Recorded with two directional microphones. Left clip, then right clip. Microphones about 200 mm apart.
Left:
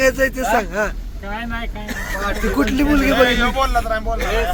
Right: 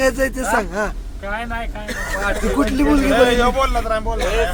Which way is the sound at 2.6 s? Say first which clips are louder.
Left 1 dB; centre (ahead or behind).